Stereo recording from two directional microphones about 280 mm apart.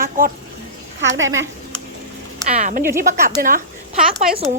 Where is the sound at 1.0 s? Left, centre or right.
Right.